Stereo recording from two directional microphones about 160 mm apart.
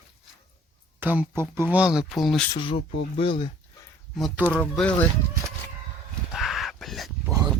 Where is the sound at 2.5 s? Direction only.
30° left (ahead or behind).